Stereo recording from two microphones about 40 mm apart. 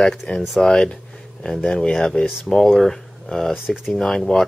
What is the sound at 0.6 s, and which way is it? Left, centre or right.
Speech, centre.